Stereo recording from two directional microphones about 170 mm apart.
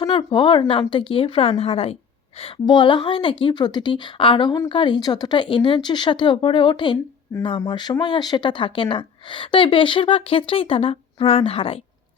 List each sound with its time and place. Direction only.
0.0 s a woman's voice: 30° left (ahead or behind)